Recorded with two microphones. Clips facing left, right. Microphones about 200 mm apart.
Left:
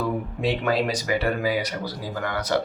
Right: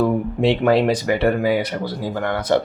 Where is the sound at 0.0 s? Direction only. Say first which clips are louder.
Right 7 dB; 55° right (ahead or behind).